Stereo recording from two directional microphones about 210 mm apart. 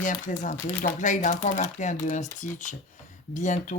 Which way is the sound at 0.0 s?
35° left (ahead or behind).